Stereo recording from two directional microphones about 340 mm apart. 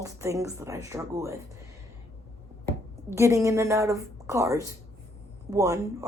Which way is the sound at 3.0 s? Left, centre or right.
Centre.